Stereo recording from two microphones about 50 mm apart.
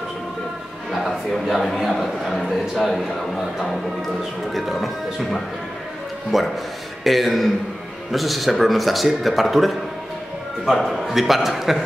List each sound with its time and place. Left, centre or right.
0.9 s a man's voice: centre